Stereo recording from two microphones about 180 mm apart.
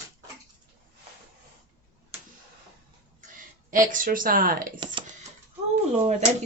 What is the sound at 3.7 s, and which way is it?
Speech, 50° right (ahead or behind).